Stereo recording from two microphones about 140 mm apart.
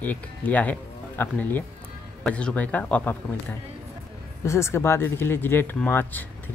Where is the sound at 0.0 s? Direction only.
10° left (ahead or behind).